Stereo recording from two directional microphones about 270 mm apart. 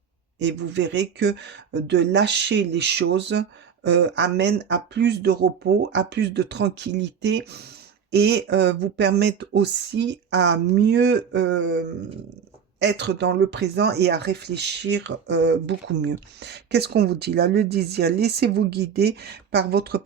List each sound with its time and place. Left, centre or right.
0.3 s speech: right